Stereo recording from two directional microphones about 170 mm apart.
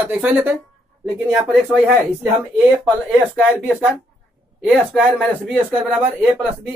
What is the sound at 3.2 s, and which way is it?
Speech, 10° right (ahead or behind).